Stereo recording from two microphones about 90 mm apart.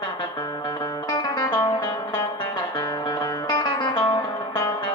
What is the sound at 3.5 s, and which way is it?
Music, 60° left (ahead or behind).